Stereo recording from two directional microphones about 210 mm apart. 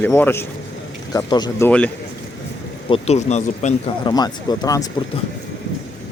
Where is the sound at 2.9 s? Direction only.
30° left (ahead or behind).